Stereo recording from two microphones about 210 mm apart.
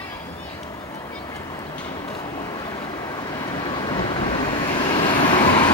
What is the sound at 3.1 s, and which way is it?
Vehicle, 15° left (ahead or behind).